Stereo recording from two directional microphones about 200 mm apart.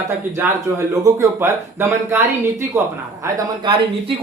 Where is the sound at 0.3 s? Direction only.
10° right (ahead or behind).